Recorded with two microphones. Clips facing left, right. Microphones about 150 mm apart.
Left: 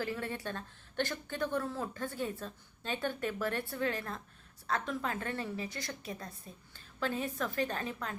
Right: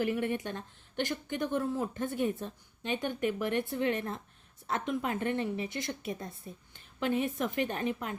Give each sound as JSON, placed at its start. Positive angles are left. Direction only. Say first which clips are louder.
{"t": 0.0, "sound": "a woman's voice", "louder": "right 6 dB", "side_deg": -20}